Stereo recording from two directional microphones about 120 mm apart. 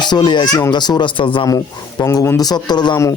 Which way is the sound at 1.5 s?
30° left (ahead or behind).